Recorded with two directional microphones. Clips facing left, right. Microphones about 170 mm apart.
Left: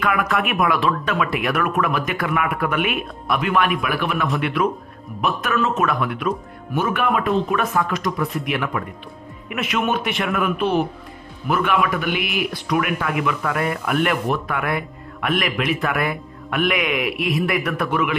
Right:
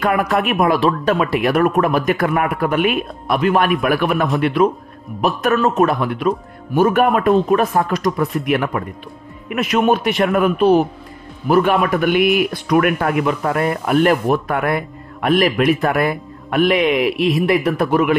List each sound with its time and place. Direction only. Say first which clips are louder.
0.0 s speech: right 4 dB; 35° right (ahead or behind)
4.4 s speech: right 6 dB; 35° right (ahead or behind)